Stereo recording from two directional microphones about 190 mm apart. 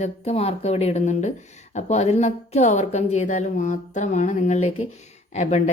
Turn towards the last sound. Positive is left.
turn(degrees=35)  # may be behind; listen again after turning